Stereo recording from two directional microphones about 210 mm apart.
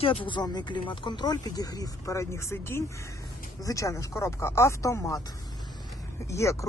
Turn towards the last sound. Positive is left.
turn(degrees=15)  # may be behind; listen again after turning